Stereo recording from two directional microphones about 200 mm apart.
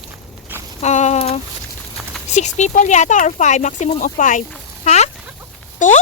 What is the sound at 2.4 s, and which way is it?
Speech, 35° left (ahead or behind).